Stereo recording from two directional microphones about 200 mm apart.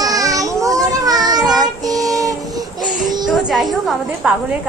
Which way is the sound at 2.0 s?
15° right (ahead or behind).